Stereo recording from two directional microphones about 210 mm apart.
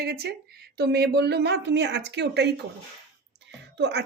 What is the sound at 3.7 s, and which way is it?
Speech, 55° right (ahead or behind).